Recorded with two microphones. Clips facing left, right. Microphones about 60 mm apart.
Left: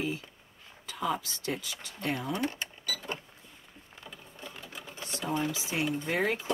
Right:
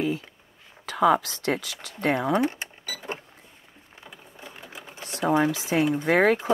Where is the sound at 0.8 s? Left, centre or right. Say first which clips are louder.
Right 12 dB; right.